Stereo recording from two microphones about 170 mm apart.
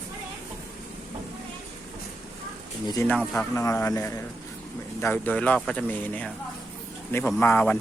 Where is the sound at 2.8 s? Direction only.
20° left (ahead or behind).